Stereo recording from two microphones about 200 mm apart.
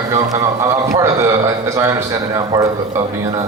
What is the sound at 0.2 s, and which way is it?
A man's voice, 15° right (ahead or behind).